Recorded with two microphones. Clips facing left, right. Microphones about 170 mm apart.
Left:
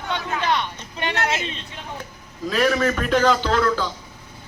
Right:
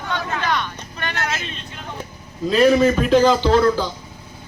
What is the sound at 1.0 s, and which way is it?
Vehicle, 20° left (ahead or behind).